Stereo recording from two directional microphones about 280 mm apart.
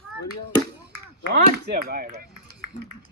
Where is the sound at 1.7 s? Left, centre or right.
Right.